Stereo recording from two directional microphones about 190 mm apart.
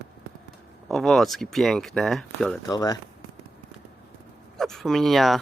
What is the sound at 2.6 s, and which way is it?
Speech, 20° left (ahead or behind).